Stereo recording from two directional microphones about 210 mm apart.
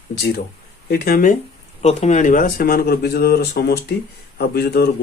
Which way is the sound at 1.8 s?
30° left (ahead or behind).